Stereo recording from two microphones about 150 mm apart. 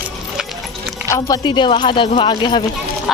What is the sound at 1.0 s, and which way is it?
Speech, 20° left (ahead or behind).